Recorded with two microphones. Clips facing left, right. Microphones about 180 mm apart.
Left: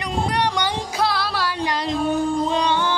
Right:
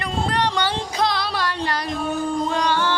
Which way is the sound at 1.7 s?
20° left (ahead or behind).